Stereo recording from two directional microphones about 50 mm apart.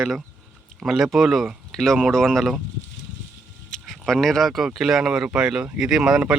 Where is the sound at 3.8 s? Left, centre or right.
Centre.